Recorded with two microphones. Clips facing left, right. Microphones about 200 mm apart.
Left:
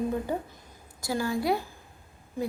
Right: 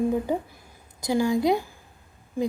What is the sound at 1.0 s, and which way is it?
Speech, 15° right (ahead or behind).